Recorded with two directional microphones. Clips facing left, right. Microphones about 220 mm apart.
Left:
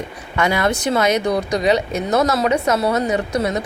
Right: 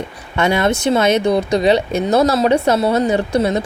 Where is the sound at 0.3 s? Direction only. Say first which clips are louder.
Right 3 dB; 25° right (ahead or behind).